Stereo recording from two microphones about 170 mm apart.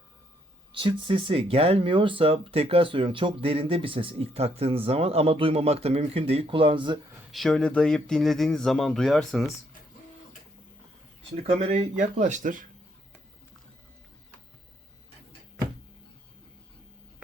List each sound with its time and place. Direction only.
0.7 s speech: 30° right (ahead or behind)
7.3 s speech: centre (ahead or behind)
11.6 s speech: 40° right (ahead or behind)